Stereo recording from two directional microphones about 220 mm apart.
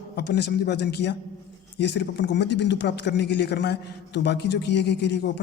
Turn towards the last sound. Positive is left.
turn(degrees=50)  # may be behind; listen again after turning